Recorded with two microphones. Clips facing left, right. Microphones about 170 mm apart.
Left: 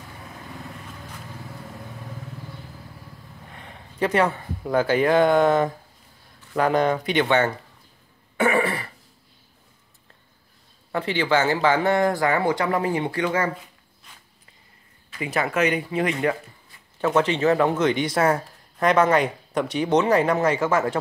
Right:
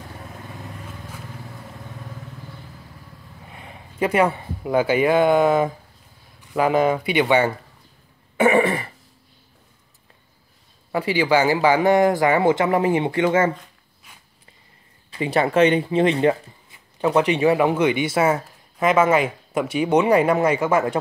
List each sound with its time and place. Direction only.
3.4 s speech: 5° right (ahead or behind)
8.4 s throat clearing: 20° right (ahead or behind)
10.9 s speech: 10° right (ahead or behind)
14.1 s walk: 10° right (ahead or behind)
15.0 s speech: 30° right (ahead or behind)
17.0 s speech: 15° right (ahead or behind)